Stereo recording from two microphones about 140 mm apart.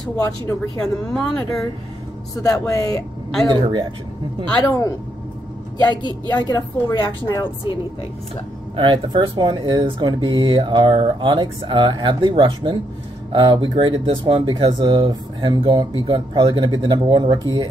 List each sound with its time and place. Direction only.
1.1 s speech: centre (ahead or behind)
2.6 s a woman's voice: 25° left (ahead or behind)
3.4 s speech: 35° right (ahead or behind)
4.6 s a woman's voice: 25° left (ahead or behind)
8.7 s speech: 35° right (ahead or behind)